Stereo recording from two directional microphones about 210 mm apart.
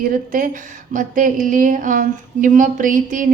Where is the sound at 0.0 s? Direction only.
40° right (ahead or behind).